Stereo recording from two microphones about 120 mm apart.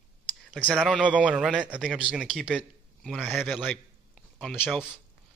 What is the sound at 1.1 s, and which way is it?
A man's voice, 10° right (ahead or behind).